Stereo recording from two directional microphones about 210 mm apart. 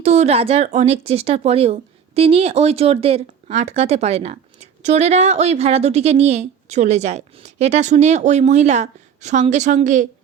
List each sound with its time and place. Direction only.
0.0 s speech: 30° right (ahead or behind)